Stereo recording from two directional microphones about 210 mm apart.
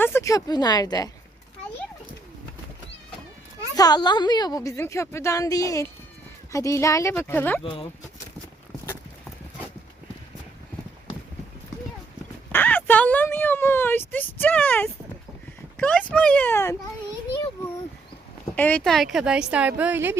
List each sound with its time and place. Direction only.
0.0 s speech: 10° left (ahead or behind)
3.8 s a woman's voice: 20° left (ahead or behind)
7.6 s speech: 25° left (ahead or behind)
12.5 s a sound: 10° left (ahead or behind)
15.8 s a woman's voice: 5° left (ahead or behind)
18.5 s speech: 5° left (ahead or behind); by 20.1 s 10° right (ahead or behind)